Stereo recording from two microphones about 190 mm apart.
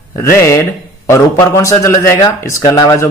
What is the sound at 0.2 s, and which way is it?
Speech, 15° left (ahead or behind).